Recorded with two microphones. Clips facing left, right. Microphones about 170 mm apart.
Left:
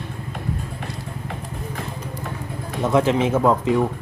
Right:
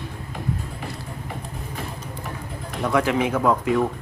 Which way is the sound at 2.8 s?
25° left (ahead or behind).